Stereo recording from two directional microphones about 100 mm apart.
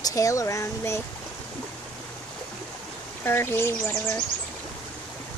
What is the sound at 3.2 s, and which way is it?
Speech, 25° left (ahead or behind).